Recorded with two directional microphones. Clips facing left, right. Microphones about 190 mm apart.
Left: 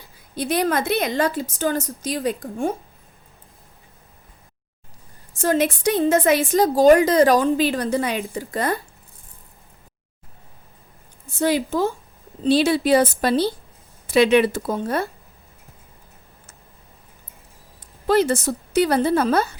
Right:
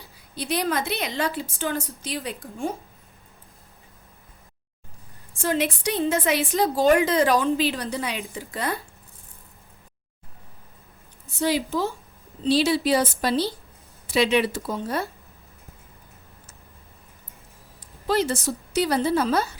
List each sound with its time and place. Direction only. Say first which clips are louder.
0.3 s a woman's voice: left 4 dB; 50° left (ahead or behind)
5.3 s a woman's voice: left 5 dB; 45° left (ahead or behind)
11.3 s a woman's voice: left 4 dB; 50° left (ahead or behind)
18.0 s a woman's voice: left 5 dB; 55° left (ahead or behind)